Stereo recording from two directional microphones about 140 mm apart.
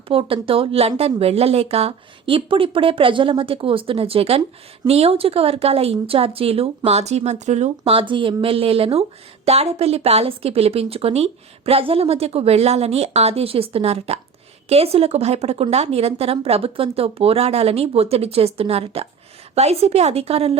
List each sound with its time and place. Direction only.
0.1 s speech: 40° right (ahead or behind)